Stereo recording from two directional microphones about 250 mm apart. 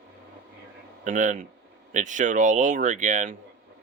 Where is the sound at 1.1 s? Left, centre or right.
Right.